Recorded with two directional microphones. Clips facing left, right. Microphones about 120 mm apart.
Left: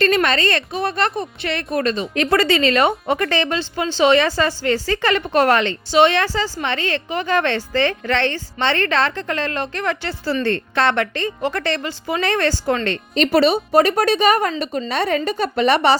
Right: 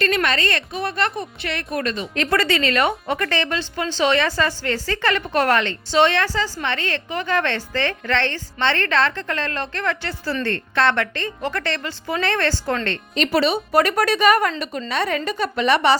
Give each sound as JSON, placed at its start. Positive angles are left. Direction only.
{"t": 0.0, "sound": "a woman's voice", "side_deg": 30}
{"t": 12.1, "sound": "a woman's voice", "side_deg": 5}
{"t": 13.1, "sound": "a woman's voice", "side_deg": 40}
{"t": 13.7, "sound": "a woman's voice", "side_deg": 25}